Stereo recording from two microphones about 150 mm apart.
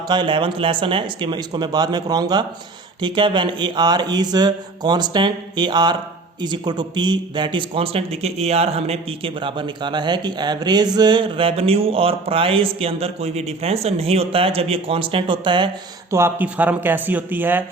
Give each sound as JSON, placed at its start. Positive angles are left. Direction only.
{"t": 0.1, "sound": "a man's voice", "side_deg": -30}
{"t": 16.1, "sound": "speech", "side_deg": -15}